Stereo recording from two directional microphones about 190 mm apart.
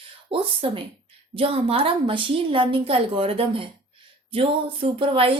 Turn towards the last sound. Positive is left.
turn(degrees=-30)  # may be behind; listen again after turning